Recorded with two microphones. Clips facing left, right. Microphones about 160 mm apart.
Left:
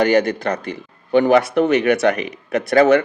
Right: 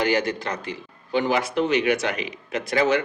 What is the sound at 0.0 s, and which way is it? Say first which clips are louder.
Speech: left 7 dB; 60° left (ahead or behind).